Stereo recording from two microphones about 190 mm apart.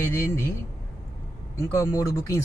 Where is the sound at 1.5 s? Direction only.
15° left (ahead or behind).